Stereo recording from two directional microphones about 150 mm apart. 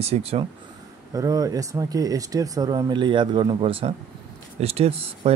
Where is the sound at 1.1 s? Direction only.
25° right (ahead or behind).